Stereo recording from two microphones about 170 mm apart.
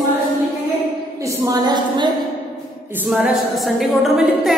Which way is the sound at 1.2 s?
20° right (ahead or behind).